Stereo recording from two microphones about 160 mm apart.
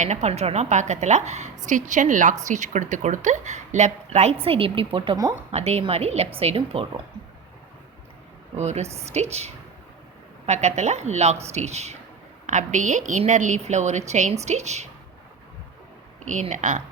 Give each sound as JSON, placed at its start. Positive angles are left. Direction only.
{"t": 0.0, "sound": "a woman's voice", "side_deg": -45}
{"t": 5.5, "sound": "speech", "side_deg": -40}
{"t": 8.5, "sound": "a woman's voice", "side_deg": -45}
{"t": 16.2, "sound": "a woman's voice", "side_deg": -50}